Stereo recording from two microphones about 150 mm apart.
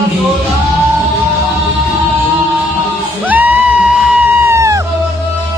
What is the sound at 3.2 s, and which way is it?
Music, 10° right (ahead or behind).